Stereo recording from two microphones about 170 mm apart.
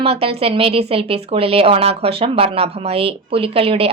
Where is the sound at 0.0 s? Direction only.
35° right (ahead or behind).